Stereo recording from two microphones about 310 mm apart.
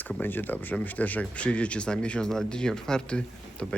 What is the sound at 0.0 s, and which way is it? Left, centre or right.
Speech, centre.